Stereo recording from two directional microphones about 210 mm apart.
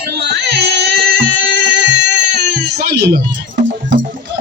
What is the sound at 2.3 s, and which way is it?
Baby cry, 50° right (ahead or behind).